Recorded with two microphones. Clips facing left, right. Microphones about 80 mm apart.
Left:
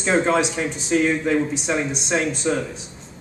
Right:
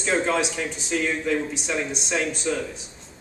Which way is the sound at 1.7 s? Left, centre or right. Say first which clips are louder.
Left 2 dB; left.